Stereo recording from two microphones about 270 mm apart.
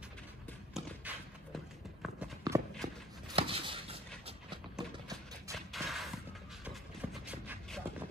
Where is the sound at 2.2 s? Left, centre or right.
Centre.